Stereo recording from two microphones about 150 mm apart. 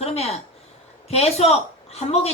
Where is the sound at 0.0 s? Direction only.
45° left (ahead or behind).